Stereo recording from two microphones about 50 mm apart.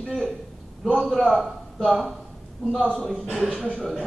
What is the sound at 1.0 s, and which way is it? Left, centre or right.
A man's voice, centre.